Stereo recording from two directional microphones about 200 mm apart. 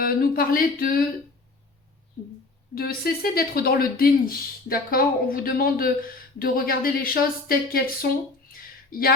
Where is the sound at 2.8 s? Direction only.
50° left (ahead or behind).